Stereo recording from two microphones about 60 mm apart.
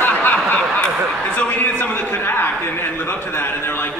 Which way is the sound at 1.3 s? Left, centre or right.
Left.